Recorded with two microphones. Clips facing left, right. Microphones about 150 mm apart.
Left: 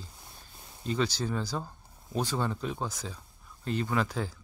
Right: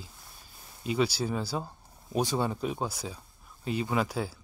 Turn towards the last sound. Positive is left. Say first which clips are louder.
# right 1 dB
turn(degrees=-10)  # may be behind; listen again after turning